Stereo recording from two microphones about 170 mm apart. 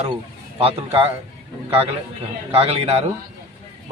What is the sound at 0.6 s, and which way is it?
Speech, 35° right (ahead or behind).